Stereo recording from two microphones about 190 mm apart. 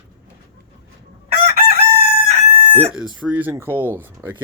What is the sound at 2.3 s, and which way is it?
Chicken, 35° right (ahead or behind).